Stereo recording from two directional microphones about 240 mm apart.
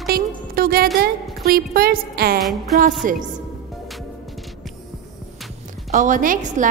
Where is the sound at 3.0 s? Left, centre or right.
Right.